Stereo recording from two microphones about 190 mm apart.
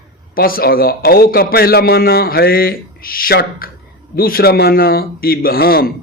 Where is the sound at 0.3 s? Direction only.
50° left (ahead or behind).